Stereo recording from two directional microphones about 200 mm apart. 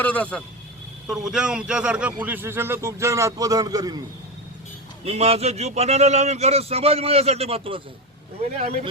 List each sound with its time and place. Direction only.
0.0 s a man's voice: 5° left (ahead or behind); by 4.0 s 20° right (ahead or behind)
5.0 s a man's voice: 30° right (ahead or behind)